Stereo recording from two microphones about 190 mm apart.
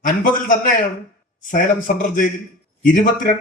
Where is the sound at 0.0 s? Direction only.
45° left (ahead or behind).